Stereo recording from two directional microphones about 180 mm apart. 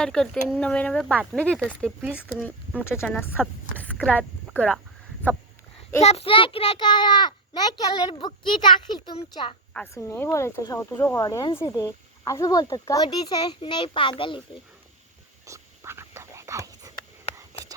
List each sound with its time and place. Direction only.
0.0 s speech: 5° left (ahead or behind)
2.8 s speech: 15° left (ahead or behind)
6.0 s speech: 35° left (ahead or behind)
9.7 s speech: 15° left (ahead or behind)
15.4 s a sound: 15° right (ahead or behind)